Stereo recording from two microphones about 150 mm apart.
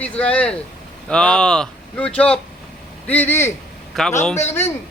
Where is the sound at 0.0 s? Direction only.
10° left (ahead or behind).